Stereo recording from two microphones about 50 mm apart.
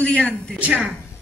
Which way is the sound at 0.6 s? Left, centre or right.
Right.